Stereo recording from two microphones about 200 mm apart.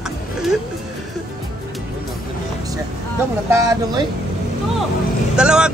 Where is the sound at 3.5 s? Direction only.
15° right (ahead or behind).